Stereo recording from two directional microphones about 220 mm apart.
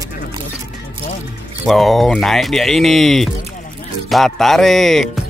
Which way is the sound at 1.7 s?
Centre (ahead or behind).